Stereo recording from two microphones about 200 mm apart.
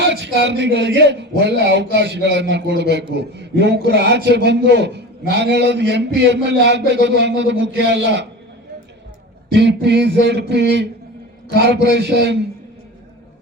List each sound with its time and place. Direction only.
0.0 s a man's voice: 60° right (ahead or behind)
9.5 s a man's voice: 60° right (ahead or behind)